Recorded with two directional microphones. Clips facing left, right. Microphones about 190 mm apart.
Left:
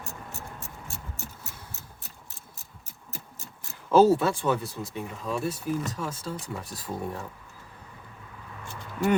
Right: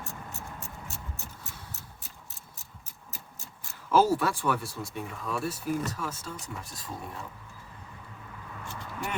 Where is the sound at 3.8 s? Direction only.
25° left (ahead or behind).